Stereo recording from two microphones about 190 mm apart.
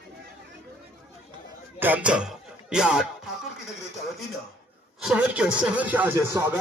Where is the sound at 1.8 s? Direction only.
10° right (ahead or behind).